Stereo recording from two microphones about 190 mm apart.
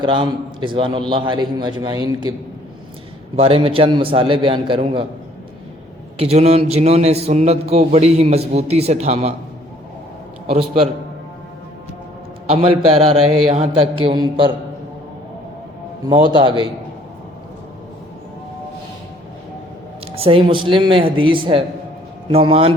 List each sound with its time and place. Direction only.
0.0 s a man's voice: 25° right (ahead or behind)
3.3 s a man's voice: 30° right (ahead or behind)
6.1 s a man's voice: 35° right (ahead or behind)
10.4 s a man's voice: 30° right (ahead or behind)
13.1 s a man's voice: 30° right (ahead or behind)
16.0 s a man's voice: 25° right (ahead or behind)
20.1 s a man's voice: 30° right (ahead or behind)